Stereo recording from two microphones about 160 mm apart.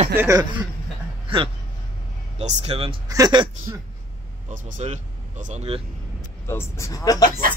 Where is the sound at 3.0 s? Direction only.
20° right (ahead or behind).